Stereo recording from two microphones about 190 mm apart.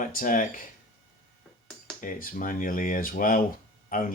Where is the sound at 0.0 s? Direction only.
45° left (ahead or behind).